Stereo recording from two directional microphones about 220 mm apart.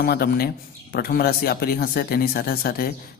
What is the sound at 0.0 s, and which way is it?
A man's voice, 45° left (ahead or behind).